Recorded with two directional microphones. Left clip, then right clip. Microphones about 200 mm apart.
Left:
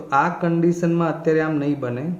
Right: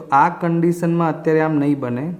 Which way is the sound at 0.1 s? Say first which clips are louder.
Right 4 dB; 40° right (ahead or behind).